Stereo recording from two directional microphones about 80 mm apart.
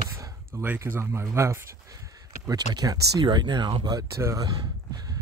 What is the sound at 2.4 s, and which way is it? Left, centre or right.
Speech, right.